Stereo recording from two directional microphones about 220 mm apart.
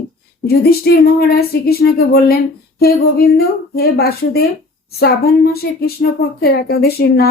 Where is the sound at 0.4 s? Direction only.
45° left (ahead or behind).